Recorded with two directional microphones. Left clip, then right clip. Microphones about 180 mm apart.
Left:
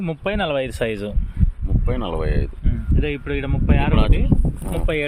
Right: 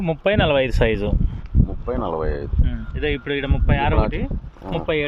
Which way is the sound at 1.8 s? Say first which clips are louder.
Right 1 dB; 40° left (ahead or behind).